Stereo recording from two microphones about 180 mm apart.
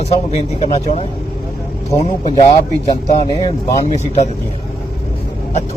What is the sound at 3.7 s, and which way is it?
Speech, 40° left (ahead or behind).